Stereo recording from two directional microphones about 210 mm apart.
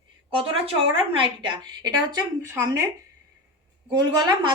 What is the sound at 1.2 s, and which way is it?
A woman's voice, 20° right (ahead or behind).